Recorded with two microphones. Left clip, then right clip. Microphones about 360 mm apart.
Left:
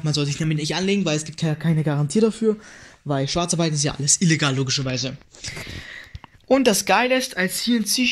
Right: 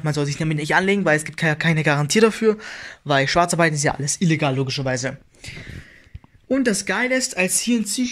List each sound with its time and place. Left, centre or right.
0.0 s speech: centre
0.9 s speech: right
1.9 s speech: right
6.5 s speech: centre